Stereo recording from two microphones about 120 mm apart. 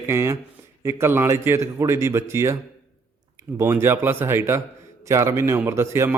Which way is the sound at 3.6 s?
20° right (ahead or behind).